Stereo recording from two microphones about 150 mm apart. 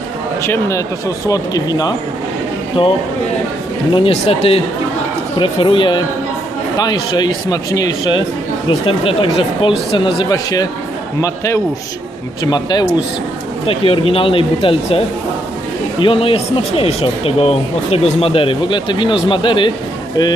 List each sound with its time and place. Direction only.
0.4 s speech: 20° left (ahead or behind)
3.9 s speech: 40° left (ahead or behind)
8.9 s speech: 40° left (ahead or behind)
10.2 s speech: 25° left (ahead or behind)